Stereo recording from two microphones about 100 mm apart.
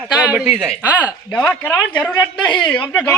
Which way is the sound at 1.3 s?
15° left (ahead or behind).